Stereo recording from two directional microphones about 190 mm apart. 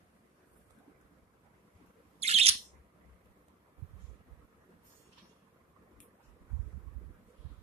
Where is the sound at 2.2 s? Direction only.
35° right (ahead or behind).